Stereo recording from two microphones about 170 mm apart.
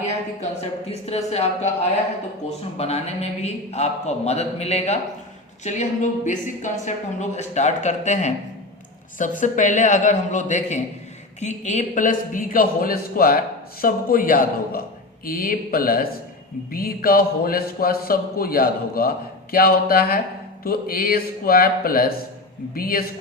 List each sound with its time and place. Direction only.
0.6 s a man's voice: 40° left (ahead or behind)
2.7 s a man's voice: 40° left (ahead or behind); by 23.0 s 60° left (ahead or behind)